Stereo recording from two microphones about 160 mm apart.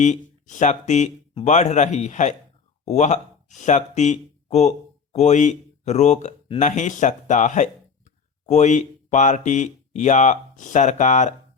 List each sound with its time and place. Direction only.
0.0 s speech: 50° left (ahead or behind)